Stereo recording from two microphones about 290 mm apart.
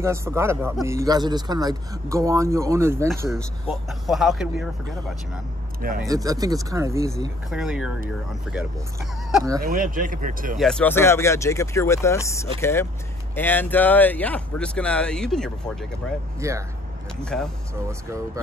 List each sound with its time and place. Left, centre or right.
0.0 s speech: centre
5.8 s speech: right
6.0 s speech: centre
9.3 s speech: centre
9.6 s speech: right
10.6 s speech: centre
16.3 s speech: centre
17.2 s speech: centre